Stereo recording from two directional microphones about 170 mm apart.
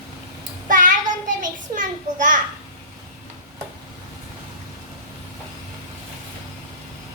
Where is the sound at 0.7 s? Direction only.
50° right (ahead or behind).